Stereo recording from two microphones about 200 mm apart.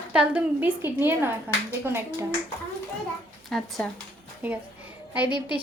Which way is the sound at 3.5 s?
Centre (ahead or behind).